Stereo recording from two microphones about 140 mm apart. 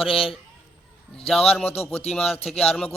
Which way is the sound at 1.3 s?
5° left (ahead or behind).